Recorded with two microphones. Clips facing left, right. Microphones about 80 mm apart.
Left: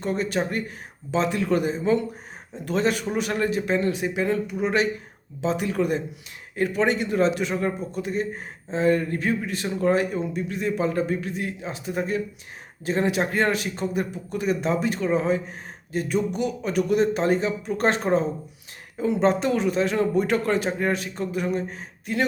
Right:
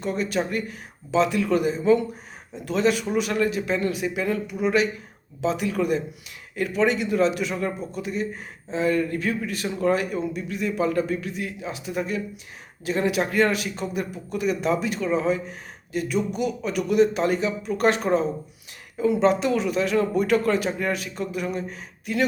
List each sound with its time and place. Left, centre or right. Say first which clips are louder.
0.0 s speech: even; left